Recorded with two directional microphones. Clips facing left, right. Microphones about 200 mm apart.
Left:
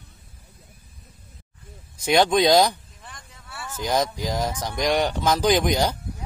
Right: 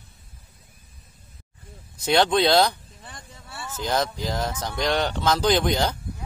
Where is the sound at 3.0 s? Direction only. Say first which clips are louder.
Right 1 dB; 30° right (ahead or behind).